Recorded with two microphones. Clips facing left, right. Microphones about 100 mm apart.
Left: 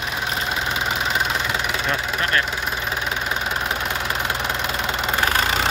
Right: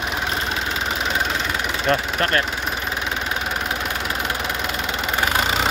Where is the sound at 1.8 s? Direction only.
50° right (ahead or behind).